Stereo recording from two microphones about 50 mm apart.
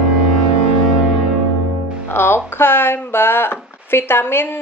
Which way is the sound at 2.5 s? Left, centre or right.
Left.